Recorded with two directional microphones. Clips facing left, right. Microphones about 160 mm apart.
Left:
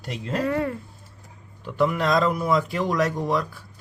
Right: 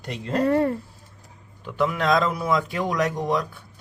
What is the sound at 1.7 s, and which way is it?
Speech, centre (ahead or behind).